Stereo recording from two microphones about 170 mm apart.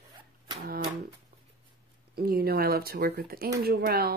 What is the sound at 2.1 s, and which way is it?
Speech, 60° right (ahead or behind).